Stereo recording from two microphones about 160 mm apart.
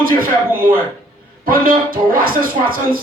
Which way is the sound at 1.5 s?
60° right (ahead or behind).